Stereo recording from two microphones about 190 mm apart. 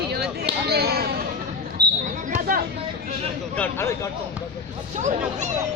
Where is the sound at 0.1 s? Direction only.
60° right (ahead or behind).